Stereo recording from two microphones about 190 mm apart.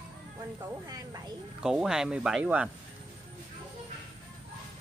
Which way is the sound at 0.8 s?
20° right (ahead or behind).